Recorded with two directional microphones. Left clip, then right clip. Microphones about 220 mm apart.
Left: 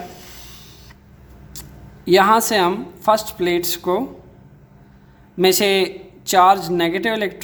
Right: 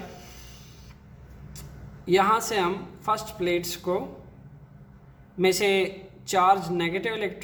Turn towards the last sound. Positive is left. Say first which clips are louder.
# left 8 dB
turn(degrees=50)  # may be behind; listen again after turning